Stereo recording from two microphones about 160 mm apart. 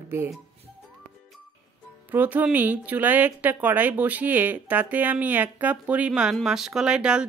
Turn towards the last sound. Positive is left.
turn(degrees=-5)  # may be behind; listen again after turning